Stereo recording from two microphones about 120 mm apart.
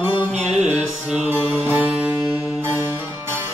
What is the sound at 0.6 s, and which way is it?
Music, 10° right (ahead or behind).